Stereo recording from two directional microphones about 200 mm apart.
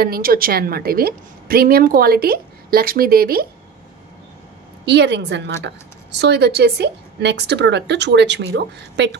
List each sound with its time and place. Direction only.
0.0 s a woman's voice: 45° right (ahead or behind)
4.8 s a woman's voice: 60° right (ahead or behind)